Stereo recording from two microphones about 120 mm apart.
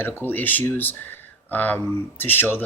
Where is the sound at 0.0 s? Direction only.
15° left (ahead or behind).